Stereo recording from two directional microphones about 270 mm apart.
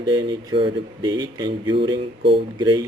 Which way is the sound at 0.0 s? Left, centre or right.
Centre.